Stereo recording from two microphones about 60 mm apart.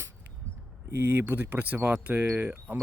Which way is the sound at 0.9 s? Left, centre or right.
Right.